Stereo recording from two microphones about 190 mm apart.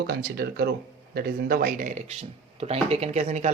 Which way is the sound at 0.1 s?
55° right (ahead or behind).